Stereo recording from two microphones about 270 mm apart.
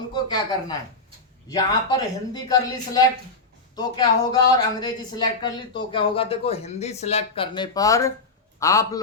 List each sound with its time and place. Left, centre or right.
0.1 s a man's voice: centre